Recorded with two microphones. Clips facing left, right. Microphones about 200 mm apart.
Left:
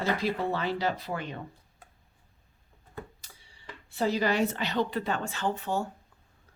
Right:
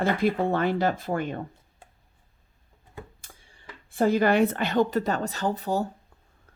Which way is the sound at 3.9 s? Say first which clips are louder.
Right 6 dB; 50° right (ahead or behind).